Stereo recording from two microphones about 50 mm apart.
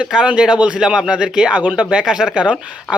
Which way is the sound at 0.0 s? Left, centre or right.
Centre.